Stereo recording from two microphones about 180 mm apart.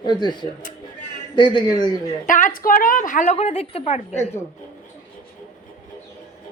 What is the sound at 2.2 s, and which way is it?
A woman's voice, 45° left (ahead or behind).